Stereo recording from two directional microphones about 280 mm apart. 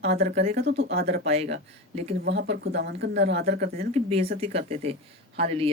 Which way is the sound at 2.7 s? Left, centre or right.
Right.